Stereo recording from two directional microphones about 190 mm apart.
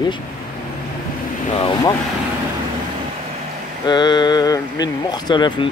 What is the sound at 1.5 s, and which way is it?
Speech, 25° left (ahead or behind).